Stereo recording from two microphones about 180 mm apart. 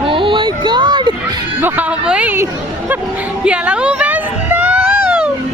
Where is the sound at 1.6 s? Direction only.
10° right (ahead or behind).